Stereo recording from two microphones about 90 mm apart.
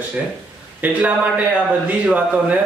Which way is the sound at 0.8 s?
20° right (ahead or behind).